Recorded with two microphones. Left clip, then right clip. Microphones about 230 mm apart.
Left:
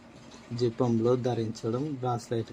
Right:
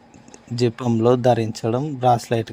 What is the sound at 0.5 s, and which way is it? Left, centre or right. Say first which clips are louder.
A man's voice: right 6 dB; right.